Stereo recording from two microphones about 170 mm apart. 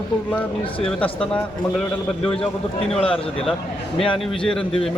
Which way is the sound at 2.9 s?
35° left (ahead or behind).